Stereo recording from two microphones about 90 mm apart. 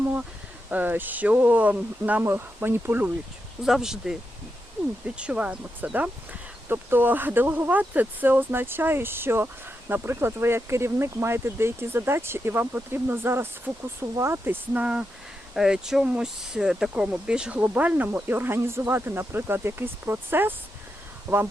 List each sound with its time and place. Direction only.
0.7 s speech: 20° right (ahead or behind)
3.6 s speech: 5° right (ahead or behind); by 21.4 s 30° right (ahead or behind)